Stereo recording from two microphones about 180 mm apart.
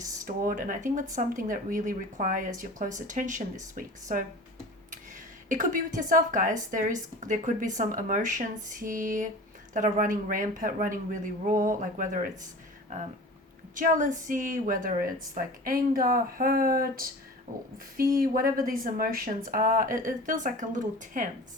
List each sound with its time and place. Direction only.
0.3 s speech: 50° right (ahead or behind)
5.5 s speech: 45° right (ahead or behind)
13.7 s speech: 45° right (ahead or behind)